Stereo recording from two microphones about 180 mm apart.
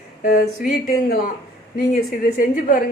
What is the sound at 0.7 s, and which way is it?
A woman's voice, 55° left (ahead or behind).